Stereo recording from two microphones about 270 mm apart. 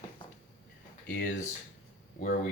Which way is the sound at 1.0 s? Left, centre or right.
Left.